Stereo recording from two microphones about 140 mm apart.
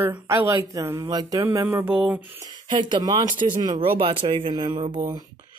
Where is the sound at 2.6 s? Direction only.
35° right (ahead or behind).